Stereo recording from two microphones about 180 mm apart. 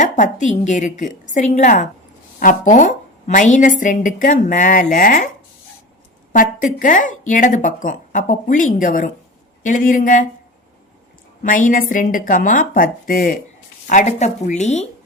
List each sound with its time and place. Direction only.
0.0 s a woman's voice: 45° left (ahead or behind)
6.3 s a woman's voice: 50° left (ahead or behind)
11.4 s a woman's voice: 50° left (ahead or behind)